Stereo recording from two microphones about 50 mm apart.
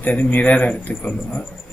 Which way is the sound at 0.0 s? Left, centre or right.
Left.